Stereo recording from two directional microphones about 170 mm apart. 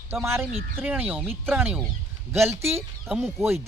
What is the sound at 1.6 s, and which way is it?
Speech, 10° right (ahead or behind).